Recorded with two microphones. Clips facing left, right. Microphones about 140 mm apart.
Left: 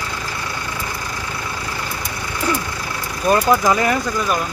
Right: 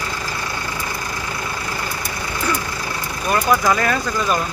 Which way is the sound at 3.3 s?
20° left (ahead or behind).